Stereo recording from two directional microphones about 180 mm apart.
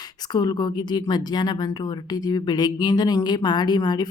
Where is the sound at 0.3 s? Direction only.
25° left (ahead or behind).